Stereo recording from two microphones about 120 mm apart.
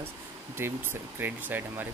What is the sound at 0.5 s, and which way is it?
Speech, 20° right (ahead or behind).